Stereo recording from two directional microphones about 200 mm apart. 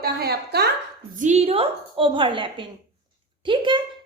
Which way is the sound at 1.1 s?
35° right (ahead or behind).